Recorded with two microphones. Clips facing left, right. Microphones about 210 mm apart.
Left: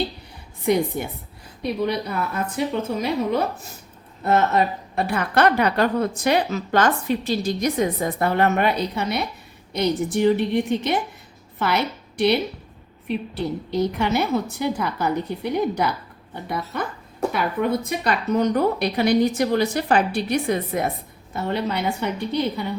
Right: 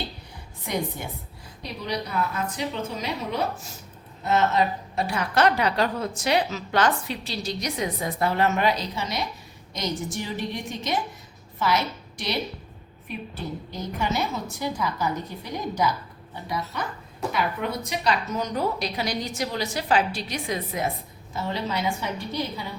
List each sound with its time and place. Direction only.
1.6 s a woman's voice: 55° left (ahead or behind)
13.1 s a woman's voice: 75° left (ahead or behind)